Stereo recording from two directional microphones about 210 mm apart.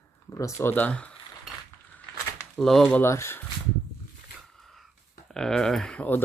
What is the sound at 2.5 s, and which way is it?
Speech, centre (ahead or behind).